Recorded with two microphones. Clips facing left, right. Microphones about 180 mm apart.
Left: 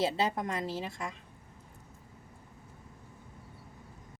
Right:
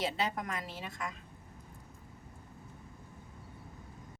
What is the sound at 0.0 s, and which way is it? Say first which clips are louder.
Speech: left 4 dB; 30° left (ahead or behind).